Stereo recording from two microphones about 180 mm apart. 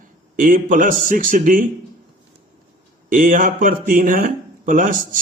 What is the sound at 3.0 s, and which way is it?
A man's voice, 45° right (ahead or behind).